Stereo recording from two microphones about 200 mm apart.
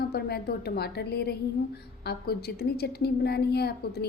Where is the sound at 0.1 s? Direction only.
50° left (ahead or behind).